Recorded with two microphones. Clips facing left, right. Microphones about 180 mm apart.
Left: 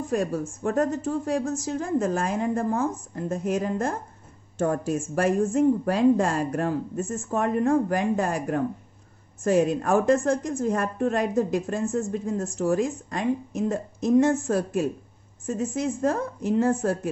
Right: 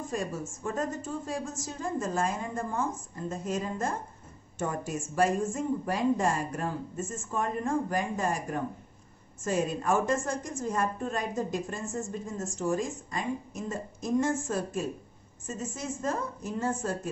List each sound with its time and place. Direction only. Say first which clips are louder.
0.6 s a woman's voice: left 8 dB; 70° left (ahead or behind)
15.4 s a woman's voice: left 9 dB; 60° left (ahead or behind)